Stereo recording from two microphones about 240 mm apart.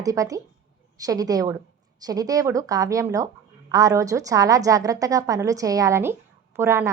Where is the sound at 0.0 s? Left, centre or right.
Centre.